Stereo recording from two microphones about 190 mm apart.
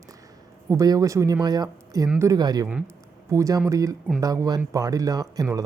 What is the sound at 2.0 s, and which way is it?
Speech, 5° right (ahead or behind).